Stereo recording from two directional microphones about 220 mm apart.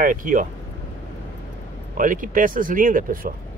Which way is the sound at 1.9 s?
35° right (ahead or behind).